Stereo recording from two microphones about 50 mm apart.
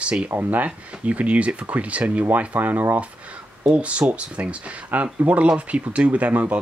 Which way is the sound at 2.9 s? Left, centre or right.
Right.